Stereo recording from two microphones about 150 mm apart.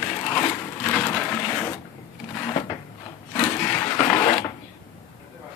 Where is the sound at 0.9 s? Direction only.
5° left (ahead or behind).